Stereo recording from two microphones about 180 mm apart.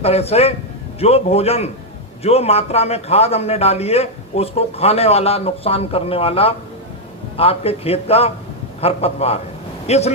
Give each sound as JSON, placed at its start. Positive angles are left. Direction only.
{"t": 0.0, "sound": "a man's voice", "side_deg": 35}